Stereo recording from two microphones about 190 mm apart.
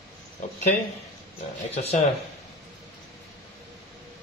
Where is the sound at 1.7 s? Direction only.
35° left (ahead or behind).